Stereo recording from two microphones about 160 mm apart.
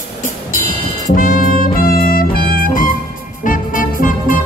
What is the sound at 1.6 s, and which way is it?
Music, 70° left (ahead or behind).